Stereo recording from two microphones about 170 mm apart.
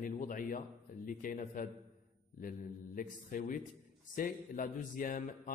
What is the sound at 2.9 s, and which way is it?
Mantra, 50° left (ahead or behind).